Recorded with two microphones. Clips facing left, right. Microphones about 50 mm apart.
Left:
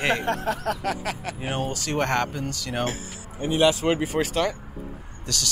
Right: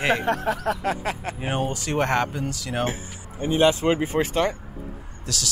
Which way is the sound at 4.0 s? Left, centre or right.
Right.